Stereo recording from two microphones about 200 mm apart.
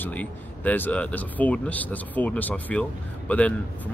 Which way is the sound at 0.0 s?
5° left (ahead or behind).